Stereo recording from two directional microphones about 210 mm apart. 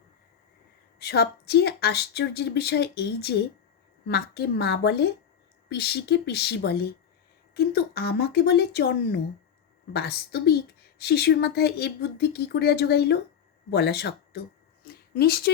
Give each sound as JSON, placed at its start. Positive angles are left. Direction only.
{"t": 0.9, "sound": "speech", "side_deg": 50}